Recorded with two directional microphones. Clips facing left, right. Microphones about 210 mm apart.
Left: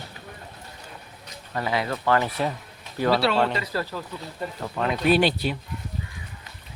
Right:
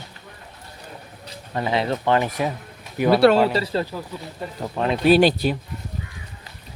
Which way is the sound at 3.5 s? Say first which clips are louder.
Right 5 dB; 25° right (ahead or behind).